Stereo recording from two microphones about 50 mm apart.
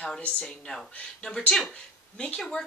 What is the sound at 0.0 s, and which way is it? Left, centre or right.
Speech, centre.